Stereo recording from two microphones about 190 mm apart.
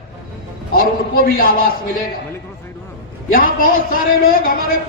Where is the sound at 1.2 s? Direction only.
50° left (ahead or behind).